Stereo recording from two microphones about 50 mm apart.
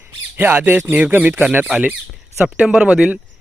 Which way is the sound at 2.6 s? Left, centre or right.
Centre.